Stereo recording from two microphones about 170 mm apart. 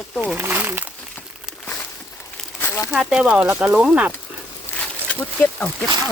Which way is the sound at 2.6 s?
15° left (ahead or behind).